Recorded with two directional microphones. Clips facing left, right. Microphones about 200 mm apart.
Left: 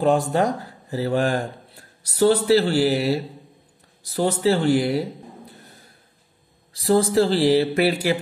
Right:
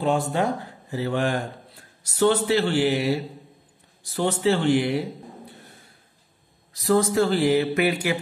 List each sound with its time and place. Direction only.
0.0 s speech: 40° left (ahead or behind)
6.7 s speech: 30° left (ahead or behind)